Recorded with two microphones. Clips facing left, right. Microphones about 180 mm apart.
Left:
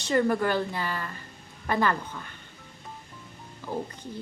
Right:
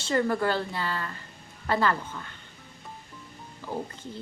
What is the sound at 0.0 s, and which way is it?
A woman's voice, 15° left (ahead or behind).